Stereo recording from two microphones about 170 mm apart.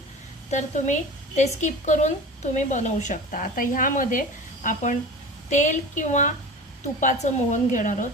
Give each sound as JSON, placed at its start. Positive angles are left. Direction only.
{"t": 0.5, "sound": "a woman's voice", "side_deg": 45}